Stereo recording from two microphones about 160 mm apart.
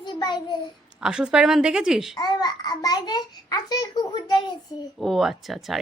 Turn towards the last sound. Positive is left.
turn(degrees=0)  # may be behind; listen again after turning